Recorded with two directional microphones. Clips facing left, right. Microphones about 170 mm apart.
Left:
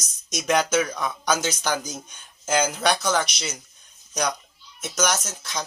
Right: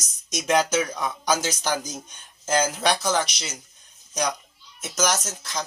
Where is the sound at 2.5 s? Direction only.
Centre (ahead or behind).